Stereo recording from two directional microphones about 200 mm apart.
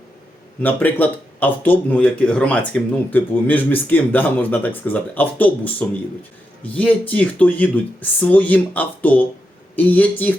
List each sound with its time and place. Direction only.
0.6 s speech: 10° left (ahead or behind)